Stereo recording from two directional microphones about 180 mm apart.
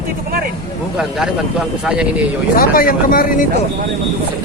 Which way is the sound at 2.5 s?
55° left (ahead or behind).